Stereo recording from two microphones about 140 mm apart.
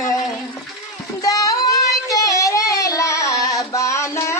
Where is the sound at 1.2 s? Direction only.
25° left (ahead or behind).